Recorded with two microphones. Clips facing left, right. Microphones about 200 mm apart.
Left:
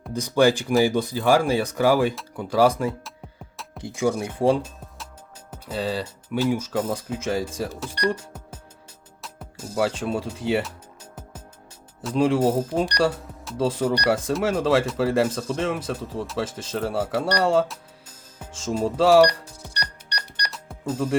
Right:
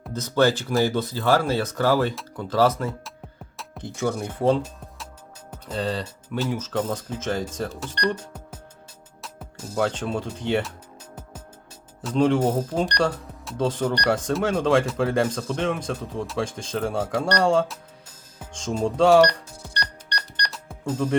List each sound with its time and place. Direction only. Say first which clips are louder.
0.1 s speech: left 2 dB; 15° left (ahead or behind)
12.0 s speech: even; 5° left (ahead or behind)
18.5 s music: even; 5° left (ahead or behind)